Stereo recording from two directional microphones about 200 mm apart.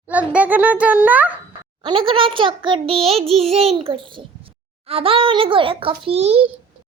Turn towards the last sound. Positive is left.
turn(degrees=-30)  # may be behind; listen again after turning